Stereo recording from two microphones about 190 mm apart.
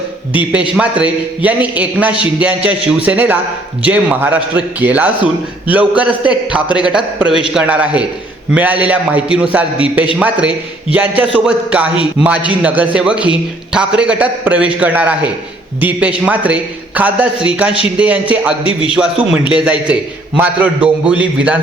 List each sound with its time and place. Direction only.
1.4 s a man's voice: 10° right (ahead or behind)
18.6 s a man's voice: 30° left (ahead or behind)
18.9 s a man's voice: 5° right (ahead or behind)